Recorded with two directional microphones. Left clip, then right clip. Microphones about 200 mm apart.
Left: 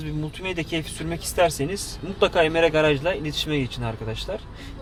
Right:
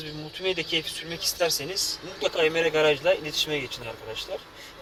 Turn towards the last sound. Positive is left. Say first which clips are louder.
# left 4 dB
turn(degrees=50)  # may be behind; listen again after turning